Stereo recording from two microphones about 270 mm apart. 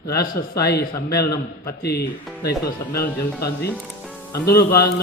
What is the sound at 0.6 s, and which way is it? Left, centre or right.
A man's voice, left.